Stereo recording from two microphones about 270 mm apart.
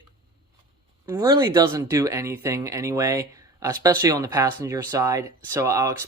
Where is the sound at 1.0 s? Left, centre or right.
Centre.